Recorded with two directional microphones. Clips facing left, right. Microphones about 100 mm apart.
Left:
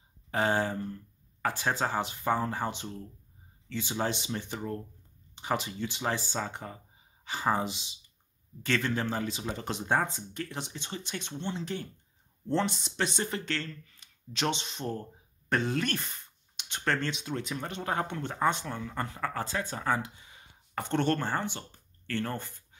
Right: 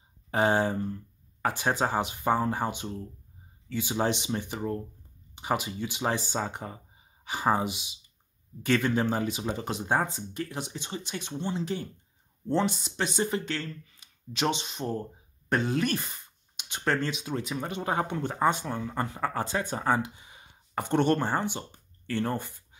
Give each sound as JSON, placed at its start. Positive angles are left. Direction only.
{"t": 0.3, "sound": "speech", "side_deg": -15}